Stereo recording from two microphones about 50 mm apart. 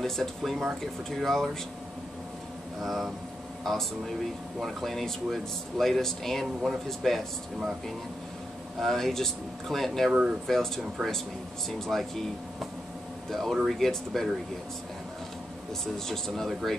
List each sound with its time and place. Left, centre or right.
0.0 s speech: centre
2.8 s speech: centre
6.4 s speech: centre
8.7 s speech: centre
11.8 s speech: centre
13.3 s speech: centre
15.8 s speech: centre